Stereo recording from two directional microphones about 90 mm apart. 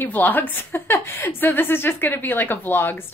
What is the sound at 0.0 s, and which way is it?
A woman's voice, 20° left (ahead or behind).